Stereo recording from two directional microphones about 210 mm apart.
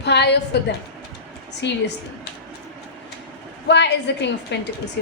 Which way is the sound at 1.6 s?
55° left (ahead or behind).